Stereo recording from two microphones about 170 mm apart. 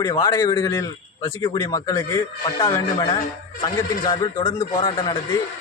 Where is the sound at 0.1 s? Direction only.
20° left (ahead or behind).